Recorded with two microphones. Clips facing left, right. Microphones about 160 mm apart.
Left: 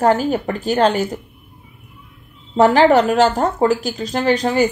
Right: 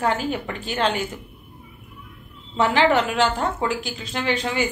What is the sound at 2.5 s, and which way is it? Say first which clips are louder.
A woman's voice: left 7 dB; 40° left (ahead or behind).